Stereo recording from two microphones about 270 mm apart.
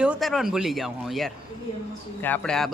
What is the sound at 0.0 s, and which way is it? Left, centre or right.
A man's voice, centre.